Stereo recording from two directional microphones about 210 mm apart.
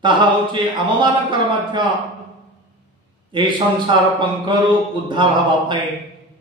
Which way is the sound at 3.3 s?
20° right (ahead or behind).